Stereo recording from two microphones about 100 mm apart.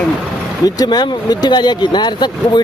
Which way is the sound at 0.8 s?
45° left (ahead or behind).